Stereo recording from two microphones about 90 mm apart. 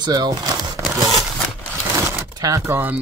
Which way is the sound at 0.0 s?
50° right (ahead or behind).